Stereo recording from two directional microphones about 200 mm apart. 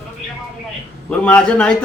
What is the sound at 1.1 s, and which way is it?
Speech, 5° left (ahead or behind).